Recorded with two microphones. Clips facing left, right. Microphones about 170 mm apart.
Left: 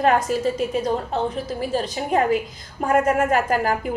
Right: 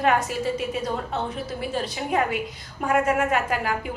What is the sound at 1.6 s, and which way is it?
A woman's voice, 35° left (ahead or behind).